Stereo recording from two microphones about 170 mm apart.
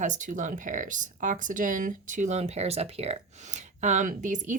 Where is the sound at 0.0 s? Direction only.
45° right (ahead or behind).